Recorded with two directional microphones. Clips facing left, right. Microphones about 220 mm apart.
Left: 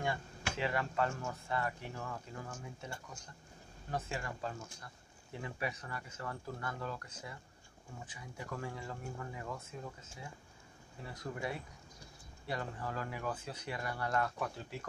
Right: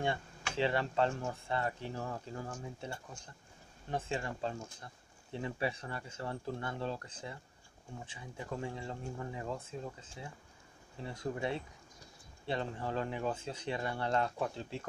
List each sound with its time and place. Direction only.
0.0 s speech: 30° right (ahead or behind)
3.9 s speech: 25° right (ahead or behind)